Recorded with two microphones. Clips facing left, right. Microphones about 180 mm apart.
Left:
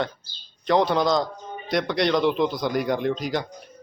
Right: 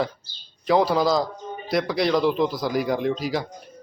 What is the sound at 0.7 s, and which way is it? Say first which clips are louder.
Speech: right 1 dB; 5° right (ahead or behind).